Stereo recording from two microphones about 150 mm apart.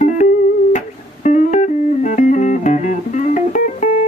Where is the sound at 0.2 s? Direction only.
50° left (ahead or behind).